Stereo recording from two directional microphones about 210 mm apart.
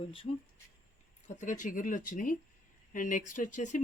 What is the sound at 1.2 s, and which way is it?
Speech, 35° left (ahead or behind).